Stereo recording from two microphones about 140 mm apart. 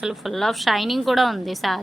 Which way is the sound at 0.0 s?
Centre (ahead or behind).